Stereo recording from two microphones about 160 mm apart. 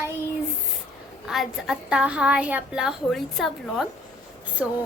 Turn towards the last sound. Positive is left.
turn(degrees=-5)  # may be behind; listen again after turning